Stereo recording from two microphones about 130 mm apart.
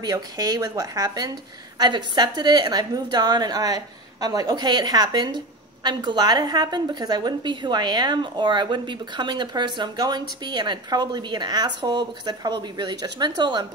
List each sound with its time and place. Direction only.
0.0 s a woman's voice: 30° right (ahead or behind)